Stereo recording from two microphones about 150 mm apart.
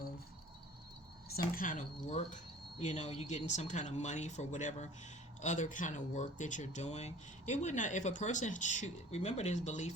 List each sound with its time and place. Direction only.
1.5 s speech: 60° left (ahead or behind)